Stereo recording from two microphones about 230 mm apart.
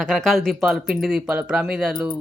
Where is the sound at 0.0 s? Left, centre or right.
Centre.